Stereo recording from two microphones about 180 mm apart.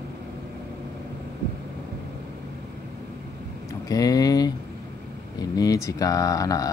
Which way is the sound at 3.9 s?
20° left (ahead or behind).